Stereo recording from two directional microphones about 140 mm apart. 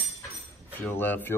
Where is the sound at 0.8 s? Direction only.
15° left (ahead or behind).